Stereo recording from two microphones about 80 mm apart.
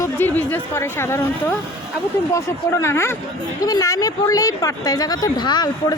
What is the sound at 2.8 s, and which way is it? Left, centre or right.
Speech, left.